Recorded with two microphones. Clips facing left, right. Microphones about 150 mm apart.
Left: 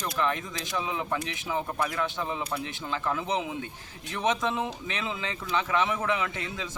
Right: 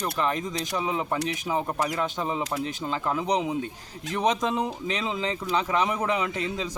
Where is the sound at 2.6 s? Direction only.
35° right (ahead or behind).